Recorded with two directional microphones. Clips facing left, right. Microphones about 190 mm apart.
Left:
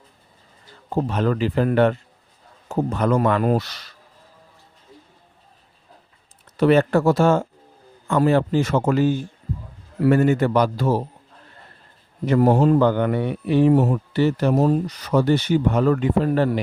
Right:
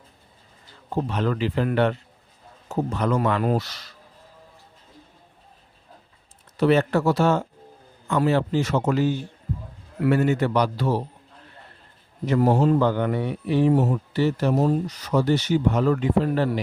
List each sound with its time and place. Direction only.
0.9 s a man's voice: 45° left (ahead or behind)
6.6 s a man's voice: 55° left (ahead or behind)
12.2 s speech: 55° left (ahead or behind)